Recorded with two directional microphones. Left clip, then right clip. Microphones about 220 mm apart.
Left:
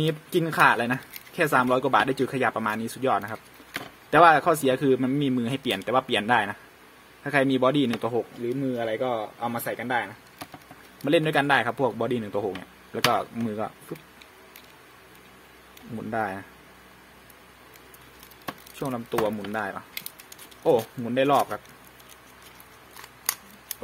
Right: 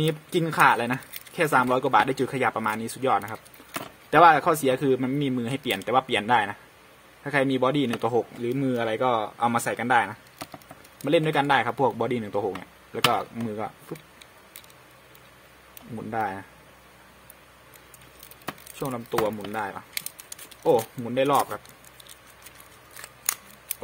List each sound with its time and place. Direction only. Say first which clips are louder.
0.0 s speech: even; centre (ahead or behind)
8.1 s speech: right 2 dB; 15° right (ahead or behind)
11.1 s speech: even; centre (ahead or behind)
16.1 s speech: even; centre (ahead or behind)
18.8 s speech: even; centre (ahead or behind)